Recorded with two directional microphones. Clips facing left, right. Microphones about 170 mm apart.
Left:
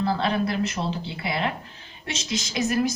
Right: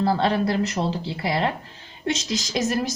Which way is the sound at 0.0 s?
35° right (ahead or behind).